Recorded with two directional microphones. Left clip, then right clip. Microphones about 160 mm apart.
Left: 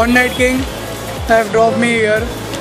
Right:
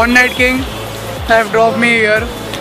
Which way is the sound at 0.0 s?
20° left (ahead or behind).